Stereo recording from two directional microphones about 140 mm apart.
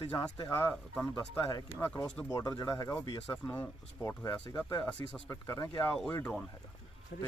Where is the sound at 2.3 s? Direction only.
25° left (ahead or behind).